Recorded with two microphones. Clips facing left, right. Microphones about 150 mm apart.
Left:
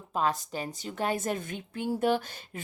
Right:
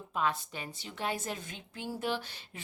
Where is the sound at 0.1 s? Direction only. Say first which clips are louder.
Left 4 dB; 35° left (ahead or behind).